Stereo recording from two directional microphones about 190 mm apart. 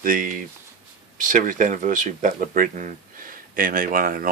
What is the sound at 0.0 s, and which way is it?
Speech, 45° right (ahead or behind).